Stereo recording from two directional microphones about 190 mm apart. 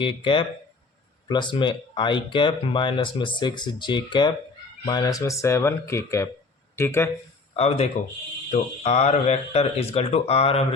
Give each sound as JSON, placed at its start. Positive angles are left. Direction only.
{"t": 0.0, "sound": "speech", "side_deg": 25}
{"t": 7.5, "sound": "speech", "side_deg": 35}